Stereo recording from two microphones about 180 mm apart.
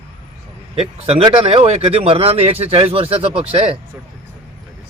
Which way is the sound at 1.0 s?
30° right (ahead or behind).